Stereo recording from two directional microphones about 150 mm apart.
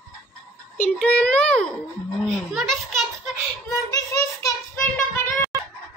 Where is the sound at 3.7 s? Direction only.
25° left (ahead or behind).